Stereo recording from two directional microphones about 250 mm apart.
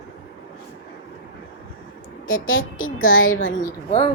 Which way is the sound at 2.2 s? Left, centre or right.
Left.